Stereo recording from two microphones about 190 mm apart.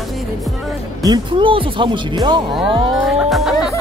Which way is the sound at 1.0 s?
25° right (ahead or behind).